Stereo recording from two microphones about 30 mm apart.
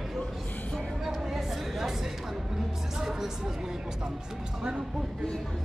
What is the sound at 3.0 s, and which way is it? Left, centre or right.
Music, centre.